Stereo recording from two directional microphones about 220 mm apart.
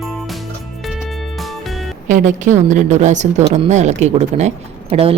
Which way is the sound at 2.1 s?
35° right (ahead or behind).